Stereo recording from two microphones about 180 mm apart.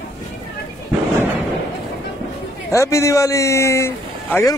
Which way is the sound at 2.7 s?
15° left (ahead or behind).